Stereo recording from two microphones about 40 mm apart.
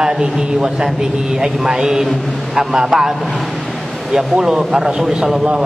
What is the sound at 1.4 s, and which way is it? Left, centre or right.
A man's voice, centre.